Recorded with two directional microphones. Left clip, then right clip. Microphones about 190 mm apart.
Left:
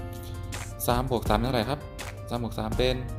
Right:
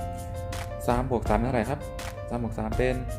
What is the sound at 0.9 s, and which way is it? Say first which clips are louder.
Speech: even; 15° left (ahead or behind).